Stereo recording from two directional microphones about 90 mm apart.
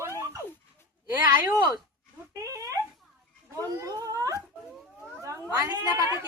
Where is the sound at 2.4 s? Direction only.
40° right (ahead or behind).